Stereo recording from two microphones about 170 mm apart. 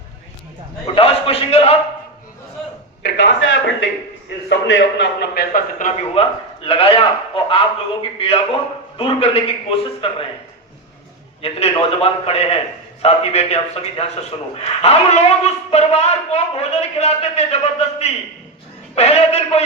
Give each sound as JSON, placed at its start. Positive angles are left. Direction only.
{"t": 0.9, "sound": "a man's voice", "side_deg": 35}
{"t": 3.0, "sound": "a man's voice", "side_deg": 90}
{"t": 5.8, "sound": "a man's voice", "side_deg": 35}
{"t": 11.4, "sound": "a man's voice", "side_deg": 35}